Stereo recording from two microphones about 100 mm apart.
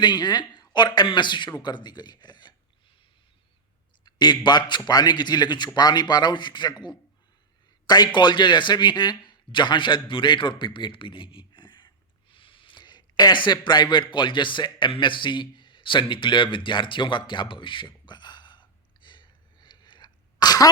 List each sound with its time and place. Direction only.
0.0 s speech: 45° left (ahead or behind)
4.0 s a man's voice: 50° left (ahead or behind)
12.3 s a sound: 60° left (ahead or behind); by 20.7 s 40° left (ahead or behind)